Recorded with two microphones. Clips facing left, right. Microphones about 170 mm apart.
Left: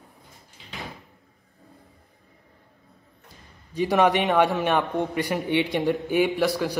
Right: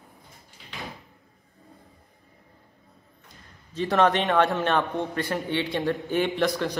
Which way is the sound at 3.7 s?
15° left (ahead or behind).